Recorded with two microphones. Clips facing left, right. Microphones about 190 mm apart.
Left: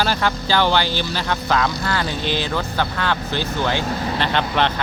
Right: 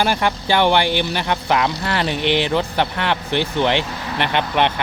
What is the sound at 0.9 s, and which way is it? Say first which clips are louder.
Speech: right 4 dB; 60° right (ahead or behind).